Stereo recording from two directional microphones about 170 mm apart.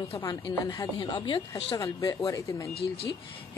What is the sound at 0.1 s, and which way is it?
Speech, 20° left (ahead or behind).